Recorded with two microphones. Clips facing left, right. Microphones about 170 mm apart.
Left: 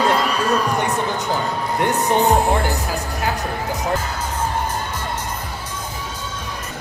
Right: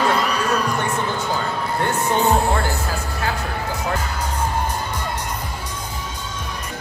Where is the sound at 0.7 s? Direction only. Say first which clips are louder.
Left 2 dB; 20° left (ahead or behind).